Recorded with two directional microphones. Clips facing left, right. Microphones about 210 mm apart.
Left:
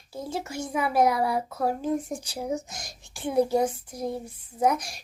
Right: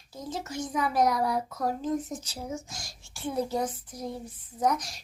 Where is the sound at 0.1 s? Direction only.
10° left (ahead or behind).